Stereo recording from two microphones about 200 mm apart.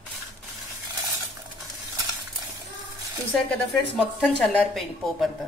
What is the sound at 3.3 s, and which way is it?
A woman's voice, centre (ahead or behind).